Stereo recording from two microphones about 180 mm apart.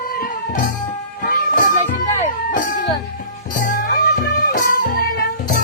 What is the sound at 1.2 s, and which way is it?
Music, 50° left (ahead or behind).